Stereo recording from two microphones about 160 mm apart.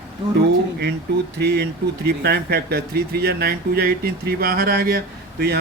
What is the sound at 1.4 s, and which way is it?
Speech, 90° right.